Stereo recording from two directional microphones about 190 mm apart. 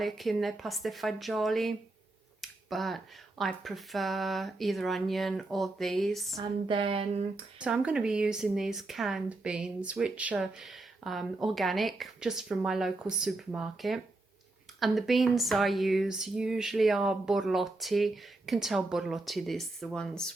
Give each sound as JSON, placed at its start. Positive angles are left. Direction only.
{"t": 0.0, "sound": "speech", "side_deg": 0}
{"t": 6.3, "sound": "speech", "side_deg": -25}
{"t": 7.6, "sound": "speech", "side_deg": -5}